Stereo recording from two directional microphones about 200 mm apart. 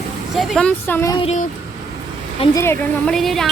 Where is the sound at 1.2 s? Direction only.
35° left (ahead or behind).